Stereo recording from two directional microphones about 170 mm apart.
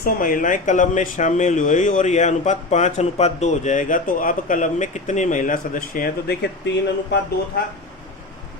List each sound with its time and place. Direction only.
0.0 s speech: 55° left (ahead or behind); by 7.2 s 85° left